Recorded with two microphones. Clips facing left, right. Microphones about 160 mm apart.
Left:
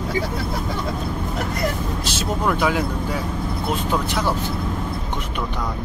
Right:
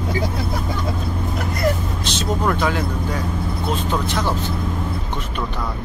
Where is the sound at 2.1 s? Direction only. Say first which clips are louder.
Right 2 dB; 10° left (ahead or behind).